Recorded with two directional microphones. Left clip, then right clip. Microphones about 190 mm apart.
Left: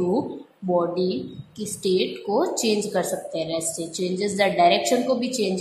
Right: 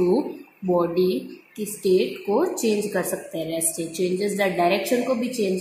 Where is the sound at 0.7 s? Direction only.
10° right (ahead or behind).